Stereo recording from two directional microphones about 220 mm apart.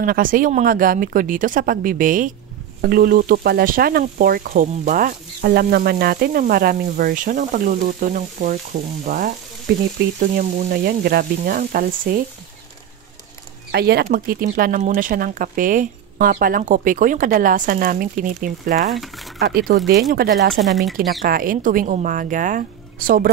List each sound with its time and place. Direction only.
0.0 s speech: 40° right (ahead or behind)
13.7 s speech: 45° right (ahead or behind)
19.3 s speech: 45° right (ahead or behind)
20.6 s speech: centre (ahead or behind)
21.3 s speech: 40° right (ahead or behind)